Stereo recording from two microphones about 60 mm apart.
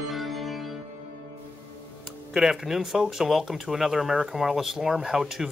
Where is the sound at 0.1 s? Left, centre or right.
Centre.